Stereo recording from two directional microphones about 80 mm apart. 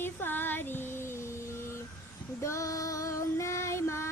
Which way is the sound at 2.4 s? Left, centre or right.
Left.